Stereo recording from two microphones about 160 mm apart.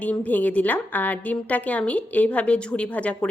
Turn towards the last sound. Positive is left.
turn(degrees=10)  # may be behind; listen again after turning